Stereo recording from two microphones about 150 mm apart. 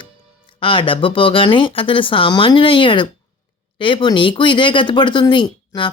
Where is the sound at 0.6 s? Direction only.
35° left (ahead or behind).